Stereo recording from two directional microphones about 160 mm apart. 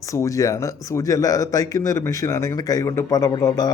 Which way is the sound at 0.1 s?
20° left (ahead or behind).